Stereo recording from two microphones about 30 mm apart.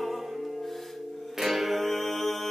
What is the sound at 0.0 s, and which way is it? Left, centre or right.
Music, centre.